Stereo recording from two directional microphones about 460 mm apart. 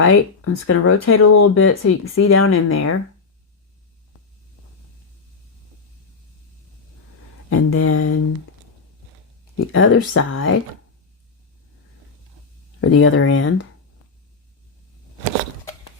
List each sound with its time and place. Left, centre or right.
0.0 s speech: left
7.5 s speech: left
9.6 s speech: left
12.8 s speech: left